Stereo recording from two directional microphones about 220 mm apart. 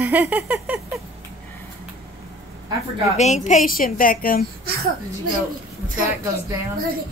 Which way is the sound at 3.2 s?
30° left (ahead or behind).